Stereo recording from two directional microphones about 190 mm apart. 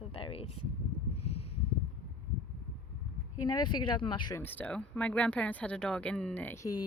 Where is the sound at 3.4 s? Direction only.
20° left (ahead or behind).